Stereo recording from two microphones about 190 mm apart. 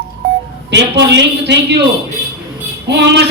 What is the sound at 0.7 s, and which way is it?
A man's voice, 65° right (ahead or behind).